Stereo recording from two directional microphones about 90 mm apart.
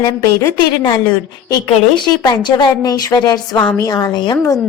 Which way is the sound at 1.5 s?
55° left (ahead or behind).